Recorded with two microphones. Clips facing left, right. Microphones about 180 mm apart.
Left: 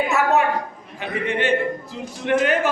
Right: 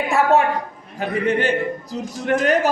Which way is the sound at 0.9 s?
40° right (ahead or behind).